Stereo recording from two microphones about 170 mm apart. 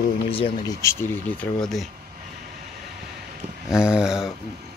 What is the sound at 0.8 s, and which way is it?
Speech, 15° left (ahead or behind).